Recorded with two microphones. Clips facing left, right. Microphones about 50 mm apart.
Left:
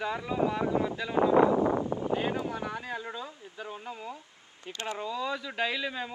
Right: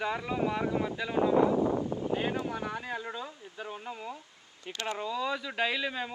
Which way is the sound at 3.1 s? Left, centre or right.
Centre.